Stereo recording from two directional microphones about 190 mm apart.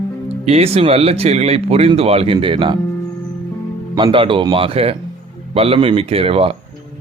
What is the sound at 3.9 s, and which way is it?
Speech, 25° right (ahead or behind).